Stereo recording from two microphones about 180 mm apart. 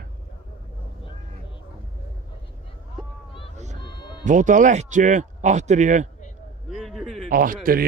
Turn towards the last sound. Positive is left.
turn(degrees=-50)  # may be behind; listen again after turning